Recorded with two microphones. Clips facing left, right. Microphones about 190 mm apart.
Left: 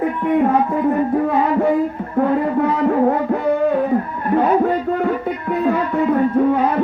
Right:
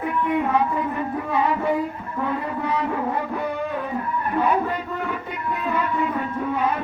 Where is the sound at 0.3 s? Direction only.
45° left (ahead or behind).